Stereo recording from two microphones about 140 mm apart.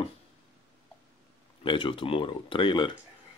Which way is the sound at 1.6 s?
35° left (ahead or behind).